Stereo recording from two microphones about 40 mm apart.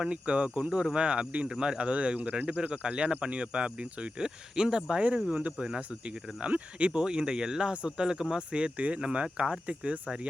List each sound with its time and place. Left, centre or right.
0.0 s speech: right
1.5 s speech: centre
1.9 s speech: right
5.3 s speech: right
5.5 s speech: centre
6.1 s speech: right